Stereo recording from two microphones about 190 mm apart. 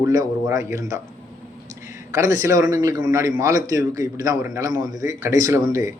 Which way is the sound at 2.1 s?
15° right (ahead or behind).